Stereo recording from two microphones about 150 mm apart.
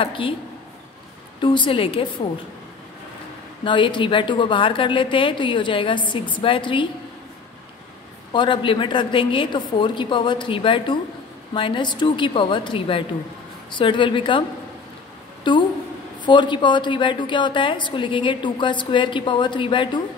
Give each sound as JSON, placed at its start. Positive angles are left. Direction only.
{"t": 0.0, "sound": "a woman's voice", "side_deg": 35}
{"t": 1.4, "sound": "a woman's voice", "side_deg": 35}
{"t": 3.6, "sound": "a woman's voice", "side_deg": 30}
{"t": 8.3, "sound": "a woman's voice", "side_deg": 35}
{"t": 15.5, "sound": "a woman's voice", "side_deg": 30}